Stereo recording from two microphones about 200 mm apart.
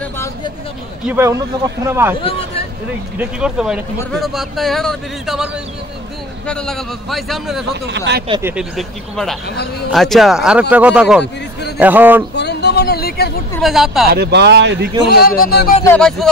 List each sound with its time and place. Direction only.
1.0 s speech: 10° right (ahead or behind)
3.2 s speech: 5° right (ahead or behind)
7.8 s speech: 60° right (ahead or behind)
8.4 s speech: 10° right (ahead or behind)
8.7 s speech: centre (ahead or behind)
12.4 s a sound: 55° left (ahead or behind)
13.6 s speech: centre (ahead or behind)
14.0 s speech: 55° right (ahead or behind)
15.0 s a man's voice: 50° left (ahead or behind)
15.8 s speech: 5° left (ahead or behind)